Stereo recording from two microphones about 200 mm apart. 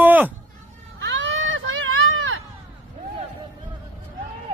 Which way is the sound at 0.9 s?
65° right (ahead or behind).